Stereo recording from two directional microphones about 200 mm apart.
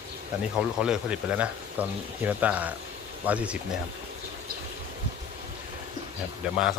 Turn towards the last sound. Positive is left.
turn(degrees=-5)  # may be behind; listen again after turning